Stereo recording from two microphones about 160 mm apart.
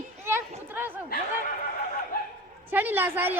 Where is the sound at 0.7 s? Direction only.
10° right (ahead or behind).